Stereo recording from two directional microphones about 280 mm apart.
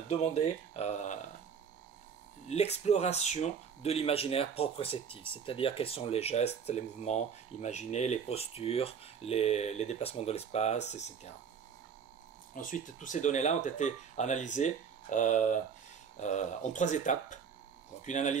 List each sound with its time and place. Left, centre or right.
0.1 s speech: left
2.4 s speech: left
12.5 s speech: left